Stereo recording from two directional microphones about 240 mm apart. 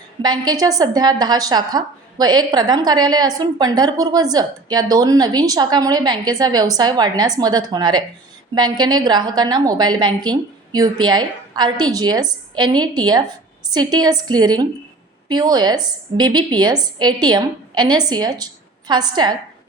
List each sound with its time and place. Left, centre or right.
0.2 s a woman's voice: centre